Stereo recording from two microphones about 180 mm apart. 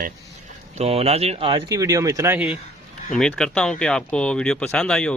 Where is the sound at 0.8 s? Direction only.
35° right (ahead or behind); by 2.6 s 10° right (ahead or behind).